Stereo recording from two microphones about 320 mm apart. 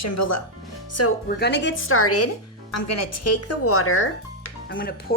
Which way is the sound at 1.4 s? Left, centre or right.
Left.